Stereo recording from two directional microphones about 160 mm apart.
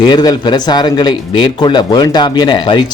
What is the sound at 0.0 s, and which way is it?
Speech, 25° left (ahead or behind).